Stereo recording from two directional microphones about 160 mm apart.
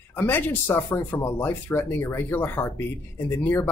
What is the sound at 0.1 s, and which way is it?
Speech, 10° left (ahead or behind).